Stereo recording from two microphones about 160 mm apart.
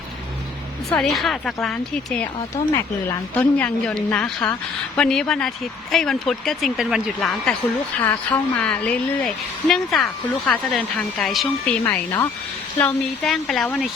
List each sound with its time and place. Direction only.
0.9 s a woman's voice: centre (ahead or behind)
11.8 s speech: 20° left (ahead or behind)
12.8 s a woman's voice: centre (ahead or behind)